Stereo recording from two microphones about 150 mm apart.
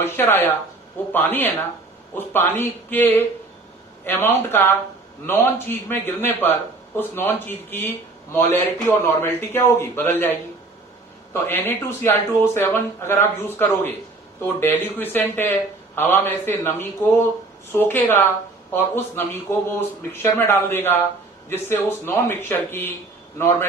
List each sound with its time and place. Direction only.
0.0 s speech: 15° left (ahead or behind)
11.3 s speech: 15° left (ahead or behind)